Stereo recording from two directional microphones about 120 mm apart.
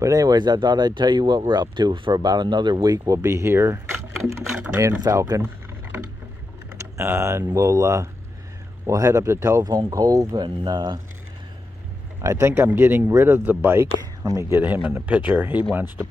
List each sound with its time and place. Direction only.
0.0 s speech: 30° right (ahead or behind)
4.2 s speech: 80° right
5.0 s speech: 30° right (ahead or behind)
7.0 s speech: 25° right (ahead or behind); by 11.0 s 40° right (ahead or behind)
12.2 s speech: 25° right (ahead or behind)
14.2 s speech: 25° right (ahead or behind)